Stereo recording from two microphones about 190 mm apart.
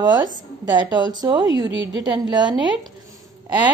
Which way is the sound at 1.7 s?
75° right (ahead or behind).